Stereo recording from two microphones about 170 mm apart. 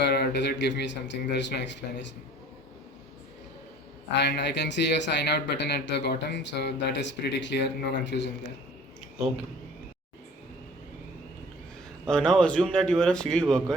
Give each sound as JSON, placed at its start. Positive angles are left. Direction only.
{"t": 0.0, "sound": "speech", "side_deg": 80}
{"t": 4.2, "sound": "speech", "side_deg": 85}
{"t": 12.0, "sound": "a man's voice", "side_deg": 5}